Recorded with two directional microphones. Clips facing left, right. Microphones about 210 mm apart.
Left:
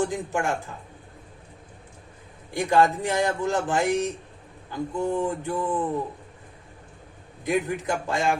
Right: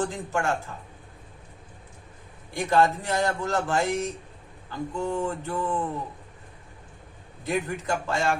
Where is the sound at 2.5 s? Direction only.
15° left (ahead or behind).